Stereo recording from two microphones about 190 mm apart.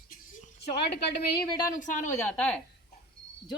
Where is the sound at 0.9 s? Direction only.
60° left (ahead or behind).